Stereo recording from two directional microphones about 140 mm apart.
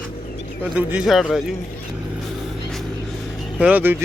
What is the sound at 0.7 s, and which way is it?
Speech, 5° right (ahead or behind).